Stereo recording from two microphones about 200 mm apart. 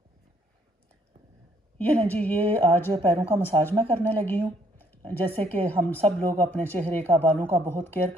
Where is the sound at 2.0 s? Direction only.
10° left (ahead or behind).